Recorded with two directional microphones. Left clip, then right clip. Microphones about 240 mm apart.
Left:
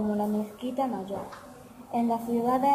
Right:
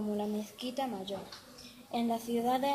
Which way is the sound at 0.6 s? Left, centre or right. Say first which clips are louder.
Left 6 dB; right.